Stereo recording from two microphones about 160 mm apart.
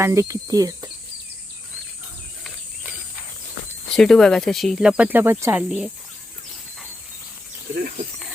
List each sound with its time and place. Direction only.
0.0 s speech: 20° right (ahead or behind)
3.9 s speech: 5° left (ahead or behind)